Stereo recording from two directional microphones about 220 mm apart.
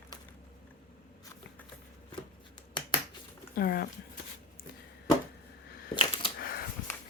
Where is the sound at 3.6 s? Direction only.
45° left (ahead or behind).